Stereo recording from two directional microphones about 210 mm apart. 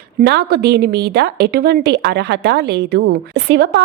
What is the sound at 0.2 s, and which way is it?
A woman's voice, 50° right (ahead or behind).